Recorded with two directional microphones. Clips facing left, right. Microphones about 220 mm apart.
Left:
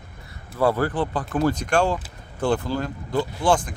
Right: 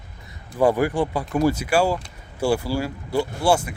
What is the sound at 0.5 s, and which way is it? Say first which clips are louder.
Speech: right 2 dB; 15° right (ahead or behind).